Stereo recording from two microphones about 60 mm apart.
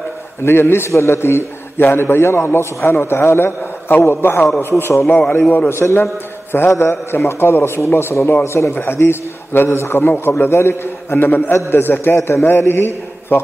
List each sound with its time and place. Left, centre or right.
0.4 s a man's voice: left
5.0 s a man's voice: centre
5.7 s a man's voice: left